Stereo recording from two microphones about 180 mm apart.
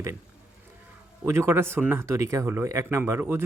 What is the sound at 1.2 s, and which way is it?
A man's voice, 15° right (ahead or behind).